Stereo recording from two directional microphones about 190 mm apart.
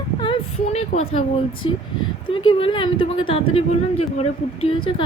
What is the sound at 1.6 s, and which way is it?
Speech, 30° left (ahead or behind).